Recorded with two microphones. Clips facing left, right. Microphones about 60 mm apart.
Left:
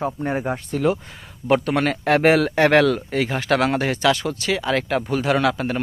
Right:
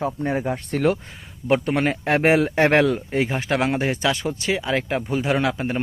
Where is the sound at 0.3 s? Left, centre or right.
Left.